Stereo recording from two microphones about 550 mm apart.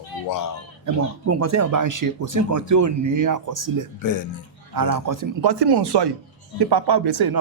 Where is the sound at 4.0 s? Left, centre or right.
Left.